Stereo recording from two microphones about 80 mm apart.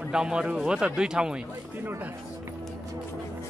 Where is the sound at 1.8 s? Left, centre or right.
Right.